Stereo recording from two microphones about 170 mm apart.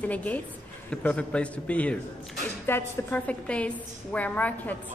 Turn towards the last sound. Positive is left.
turn(degrees=10)  # may be behind; listen again after turning